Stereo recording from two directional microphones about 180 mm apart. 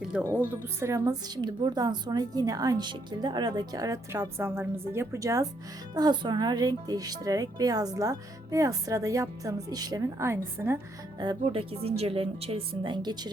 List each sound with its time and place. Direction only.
0.2 s speech: 10° right (ahead or behind)
11.2 s speech: 30° right (ahead or behind)